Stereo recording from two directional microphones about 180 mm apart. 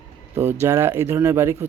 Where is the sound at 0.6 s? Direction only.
15° right (ahead or behind).